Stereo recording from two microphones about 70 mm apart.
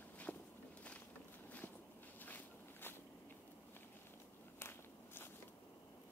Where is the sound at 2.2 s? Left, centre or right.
Left.